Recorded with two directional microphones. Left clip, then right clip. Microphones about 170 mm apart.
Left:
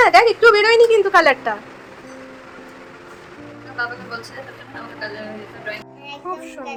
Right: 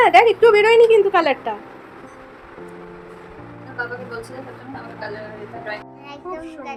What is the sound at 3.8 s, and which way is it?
Speech, 25° right (ahead or behind).